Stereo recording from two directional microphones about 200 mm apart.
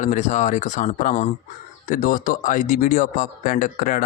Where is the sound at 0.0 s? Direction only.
40° left (ahead or behind).